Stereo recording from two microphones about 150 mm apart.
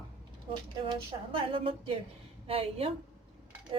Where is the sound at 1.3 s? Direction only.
35° right (ahead or behind).